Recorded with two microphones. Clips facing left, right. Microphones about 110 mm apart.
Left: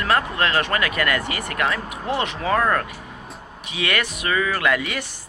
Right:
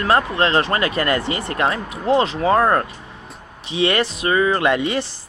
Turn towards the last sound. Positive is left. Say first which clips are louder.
# right 4 dB
turn(degrees=-30)  # may be behind; listen again after turning